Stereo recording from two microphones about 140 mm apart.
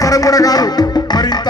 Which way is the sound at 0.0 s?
25° left (ahead or behind).